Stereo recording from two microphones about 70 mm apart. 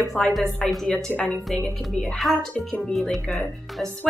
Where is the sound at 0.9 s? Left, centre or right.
Centre.